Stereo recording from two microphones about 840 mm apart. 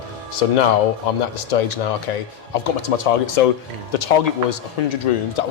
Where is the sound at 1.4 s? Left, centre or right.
Left.